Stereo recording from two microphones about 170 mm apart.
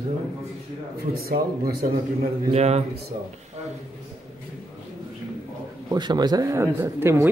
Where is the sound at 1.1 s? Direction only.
60° right (ahead or behind).